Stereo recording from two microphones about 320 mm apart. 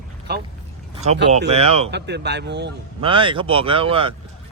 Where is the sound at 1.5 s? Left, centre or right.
Centre.